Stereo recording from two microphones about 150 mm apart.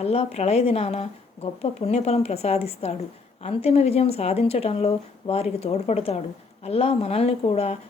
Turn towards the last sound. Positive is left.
turn(degrees=45)  # may be behind; listen again after turning